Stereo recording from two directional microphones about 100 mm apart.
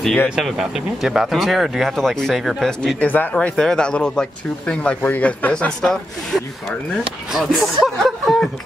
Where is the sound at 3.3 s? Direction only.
5° left (ahead or behind).